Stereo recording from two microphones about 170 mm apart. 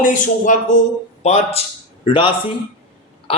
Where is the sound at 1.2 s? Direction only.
35° left (ahead or behind).